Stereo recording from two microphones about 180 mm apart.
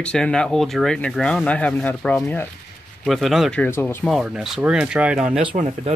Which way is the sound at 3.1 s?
Centre (ahead or behind).